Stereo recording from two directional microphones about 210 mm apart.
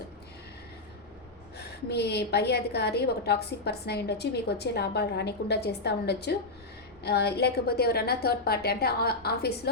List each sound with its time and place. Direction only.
1.5 s a woman's voice: 50° left (ahead or behind)